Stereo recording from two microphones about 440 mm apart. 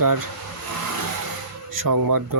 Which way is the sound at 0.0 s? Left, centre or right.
Right.